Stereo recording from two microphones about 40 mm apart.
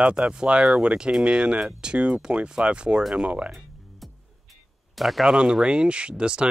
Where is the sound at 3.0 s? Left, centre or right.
Centre.